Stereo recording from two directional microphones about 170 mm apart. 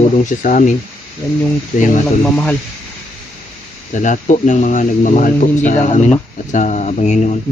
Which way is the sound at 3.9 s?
45° left (ahead or behind).